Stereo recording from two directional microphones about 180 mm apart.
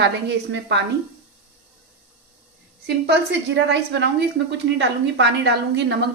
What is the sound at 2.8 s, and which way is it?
A woman's voice, 65° right (ahead or behind).